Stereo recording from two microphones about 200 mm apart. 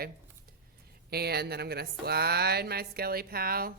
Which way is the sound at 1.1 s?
55° right (ahead or behind).